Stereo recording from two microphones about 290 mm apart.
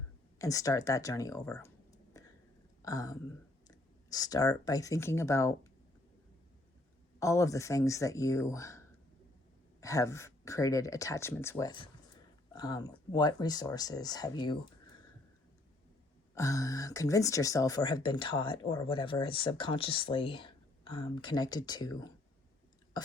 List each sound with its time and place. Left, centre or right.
0.3 s speech: centre
2.8 s speech: centre
7.2 s speech: centre
9.8 s speech: centre
16.3 s speech: centre